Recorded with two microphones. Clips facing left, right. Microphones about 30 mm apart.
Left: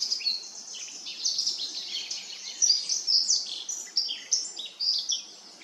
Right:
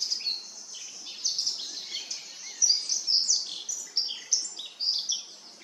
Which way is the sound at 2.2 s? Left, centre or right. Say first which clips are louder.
Left 3 dB; left.